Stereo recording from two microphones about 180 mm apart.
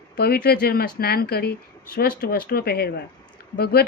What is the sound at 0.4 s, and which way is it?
Speech, 60° left (ahead or behind).